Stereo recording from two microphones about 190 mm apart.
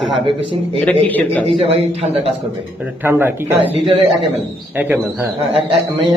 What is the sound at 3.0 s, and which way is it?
A man's voice, 10° right (ahead or behind).